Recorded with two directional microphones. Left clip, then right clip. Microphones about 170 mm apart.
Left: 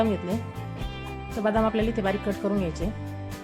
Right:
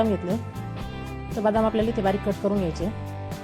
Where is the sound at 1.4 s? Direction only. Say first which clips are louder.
Right 2 dB; 15° right (ahead or behind).